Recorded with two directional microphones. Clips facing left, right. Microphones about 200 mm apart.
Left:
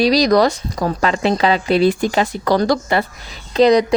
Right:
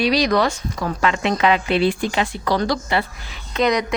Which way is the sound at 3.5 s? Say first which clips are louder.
Left 7 dB; 35° left (ahead or behind).